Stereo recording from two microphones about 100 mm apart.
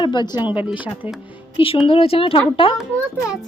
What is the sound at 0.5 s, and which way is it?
Speech, 15° right (ahead or behind).